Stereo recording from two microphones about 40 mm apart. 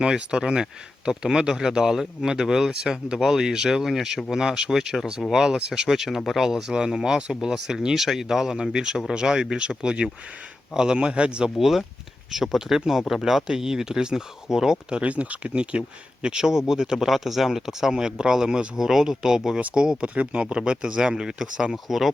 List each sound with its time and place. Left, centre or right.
0.0 s speech: right
5.9 s speech: centre; by 11.5 s right
11.5 s speech: centre
15.0 s speech: right
16.2 s speech: centre
21.7 s speech: centre